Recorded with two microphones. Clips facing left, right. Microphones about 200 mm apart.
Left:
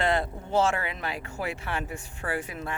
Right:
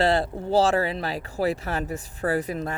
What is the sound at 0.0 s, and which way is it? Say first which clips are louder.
Speech: right 5 dB; 35° right (ahead or behind).